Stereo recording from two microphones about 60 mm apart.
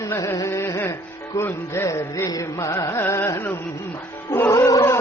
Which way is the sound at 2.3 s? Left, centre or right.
Left.